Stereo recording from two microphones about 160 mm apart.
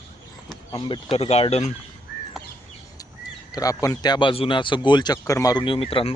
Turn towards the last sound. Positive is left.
turn(degrees=35)  # may be behind; listen again after turning